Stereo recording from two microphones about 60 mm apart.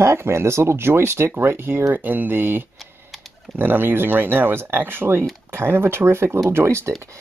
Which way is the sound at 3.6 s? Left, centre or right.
Right.